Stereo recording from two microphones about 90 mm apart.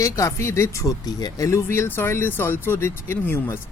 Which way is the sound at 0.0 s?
35° left (ahead or behind).